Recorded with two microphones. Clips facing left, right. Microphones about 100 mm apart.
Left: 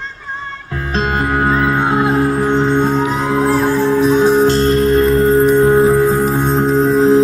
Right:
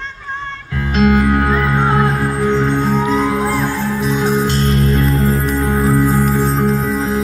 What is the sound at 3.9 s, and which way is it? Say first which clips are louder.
Music: left 6 dB; 45° left (ahead or behind).